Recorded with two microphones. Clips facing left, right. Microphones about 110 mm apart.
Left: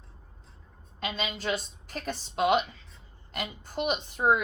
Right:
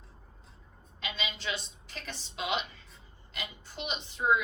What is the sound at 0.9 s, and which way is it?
A woman's voice, 45° left (ahead or behind).